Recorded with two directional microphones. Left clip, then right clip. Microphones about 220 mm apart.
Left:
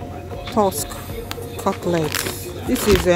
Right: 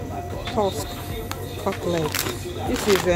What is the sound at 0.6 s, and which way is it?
Speech, 25° left (ahead or behind).